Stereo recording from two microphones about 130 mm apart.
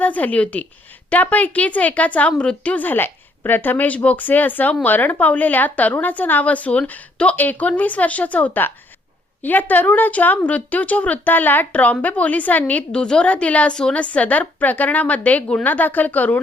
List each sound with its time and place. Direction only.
0.0 s a woman's voice: 10° left (ahead or behind)